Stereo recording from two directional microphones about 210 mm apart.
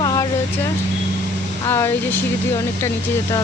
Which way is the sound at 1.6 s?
10° left (ahead or behind).